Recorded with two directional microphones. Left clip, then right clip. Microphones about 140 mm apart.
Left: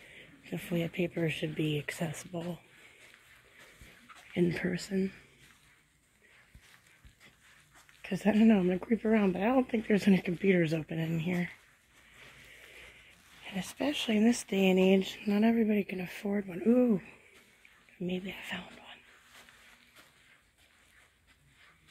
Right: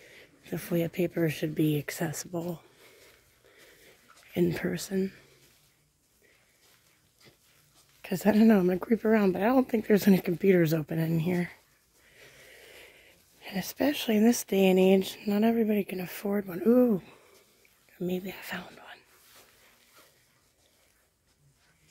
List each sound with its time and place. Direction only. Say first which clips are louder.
0.0 s speech: even; 35° right (ahead or behind)
4.3 s speech: right 3 dB; 30° right (ahead or behind)
8.0 s speech: right 4 dB; 40° right (ahead or behind)
13.4 s speech: right 5 dB; 50° right (ahead or behind); by 17.2 s 25° right (ahead or behind)
17.9 s speech: right 4 dB; 40° right (ahead or behind)